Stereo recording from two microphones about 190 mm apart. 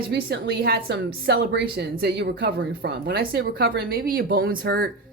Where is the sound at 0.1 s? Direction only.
60° right (ahead or behind).